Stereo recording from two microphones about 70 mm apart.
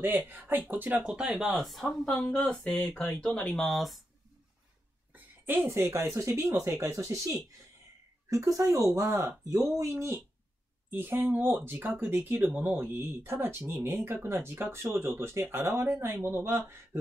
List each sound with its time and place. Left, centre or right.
0.3 s speech: right
1.1 s speech: centre
1.6 s speech: centre
5.1 s a sound: right
5.7 s speech: right
8.5 s speech: right